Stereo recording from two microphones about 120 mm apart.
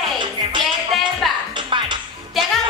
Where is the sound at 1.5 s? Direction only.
40° right (ahead or behind).